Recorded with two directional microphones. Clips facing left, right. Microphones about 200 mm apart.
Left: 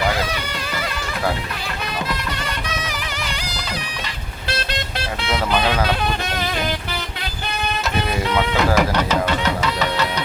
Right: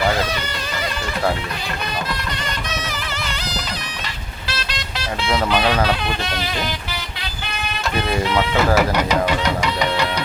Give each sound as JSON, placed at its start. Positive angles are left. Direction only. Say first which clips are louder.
{"t": 2.7, "sound": "music", "louder": "even", "side_deg": 10}
{"t": 4.4, "sound": "vehicle", "louder": "left 4 dB", "side_deg": 55}
{"t": 8.5, "sound": "speech", "louder": "right 1 dB", "side_deg": -5}